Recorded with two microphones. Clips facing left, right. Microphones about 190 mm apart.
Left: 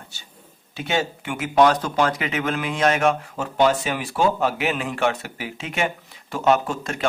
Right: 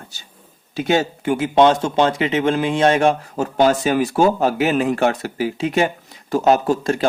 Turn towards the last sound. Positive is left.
turn(degrees=-35)  # may be behind; listen again after turning